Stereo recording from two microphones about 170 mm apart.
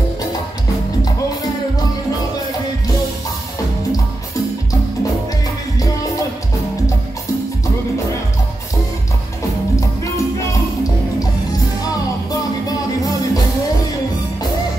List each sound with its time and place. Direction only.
11.8 s music: 20° left (ahead or behind)